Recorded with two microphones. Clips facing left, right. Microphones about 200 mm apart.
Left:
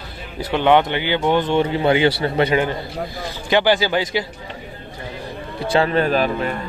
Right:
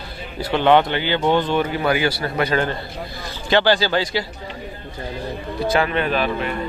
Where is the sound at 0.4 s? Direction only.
15° left (ahead or behind).